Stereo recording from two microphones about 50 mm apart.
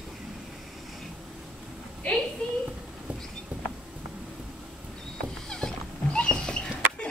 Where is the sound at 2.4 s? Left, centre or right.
Left.